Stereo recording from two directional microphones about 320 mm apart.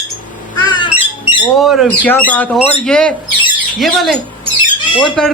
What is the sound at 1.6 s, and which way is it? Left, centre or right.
A man's voice, centre.